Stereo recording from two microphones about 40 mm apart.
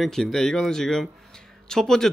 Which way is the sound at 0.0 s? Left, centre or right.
Centre.